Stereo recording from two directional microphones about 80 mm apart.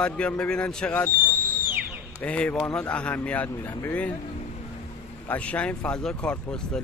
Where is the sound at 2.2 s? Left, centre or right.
Centre.